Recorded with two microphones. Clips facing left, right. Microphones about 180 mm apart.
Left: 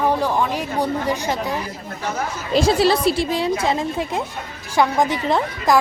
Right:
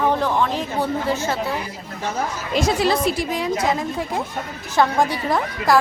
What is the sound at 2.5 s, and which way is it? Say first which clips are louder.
A woman's voice: left 3 dB; 30° left (ahead or behind).